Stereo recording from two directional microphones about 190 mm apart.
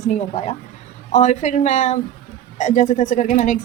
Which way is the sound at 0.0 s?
35° left (ahead or behind).